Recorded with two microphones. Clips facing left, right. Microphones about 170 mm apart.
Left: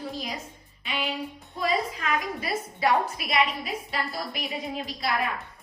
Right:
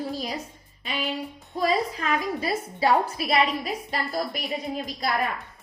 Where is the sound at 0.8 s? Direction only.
40° right (ahead or behind).